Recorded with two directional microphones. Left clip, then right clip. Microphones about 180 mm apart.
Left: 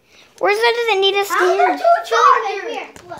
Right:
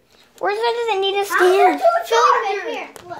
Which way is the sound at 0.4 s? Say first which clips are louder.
Left 5 dB; 35° left (ahead or behind).